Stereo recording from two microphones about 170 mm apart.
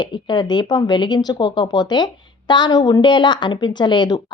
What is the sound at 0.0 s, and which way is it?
Speech, 25° left (ahead or behind).